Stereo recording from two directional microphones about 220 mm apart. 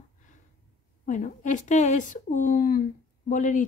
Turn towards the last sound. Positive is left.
turn(degrees=35)  # may be behind; listen again after turning